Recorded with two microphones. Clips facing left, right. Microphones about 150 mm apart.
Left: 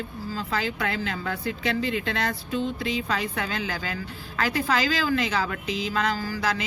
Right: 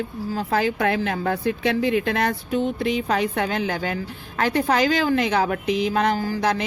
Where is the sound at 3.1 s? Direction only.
50° right (ahead or behind).